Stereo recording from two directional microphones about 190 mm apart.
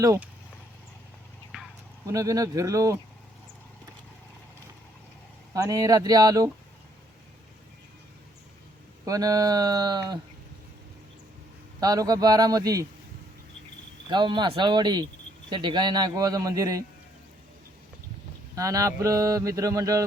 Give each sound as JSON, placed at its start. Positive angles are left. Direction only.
{"t": 0.0, "sound": "speech", "side_deg": -15}
{"t": 1.5, "sound": "a sound", "side_deg": -5}
{"t": 2.0, "sound": "speech", "side_deg": -15}
{"t": 5.5, "sound": "a man's voice", "side_deg": -20}
{"t": 9.0, "sound": "a man's voice", "side_deg": -20}
{"t": 11.8, "sound": "a man's voice", "side_deg": -20}
{"t": 14.1, "sound": "a man's voice", "side_deg": -25}
{"t": 18.5, "sound": "speech", "side_deg": -15}